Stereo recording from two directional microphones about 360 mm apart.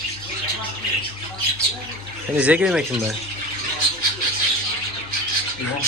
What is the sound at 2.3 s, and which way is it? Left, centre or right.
Speech, centre.